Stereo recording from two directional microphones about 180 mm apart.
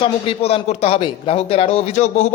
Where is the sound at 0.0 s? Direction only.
30° left (ahead or behind).